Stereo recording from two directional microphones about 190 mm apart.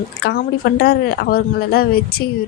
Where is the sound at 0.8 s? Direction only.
55° left (ahead or behind).